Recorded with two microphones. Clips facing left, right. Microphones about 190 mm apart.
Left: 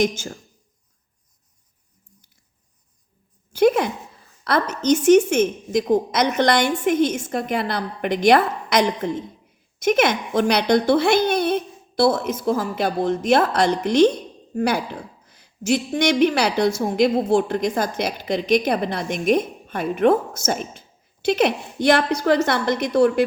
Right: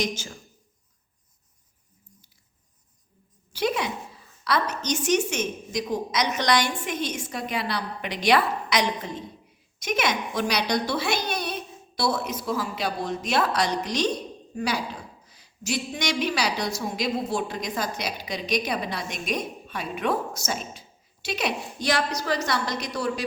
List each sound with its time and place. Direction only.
3.5 s a woman's voice: 50° left (ahead or behind)